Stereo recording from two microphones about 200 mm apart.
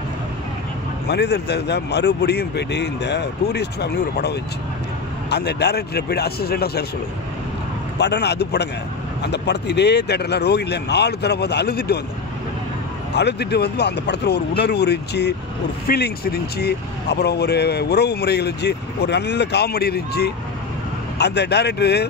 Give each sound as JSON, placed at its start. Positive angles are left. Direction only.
{"t": 1.0, "sound": "speech", "side_deg": 55}
{"t": 8.0, "sound": "speech", "side_deg": 55}
{"t": 13.1, "sound": "speech", "side_deg": 55}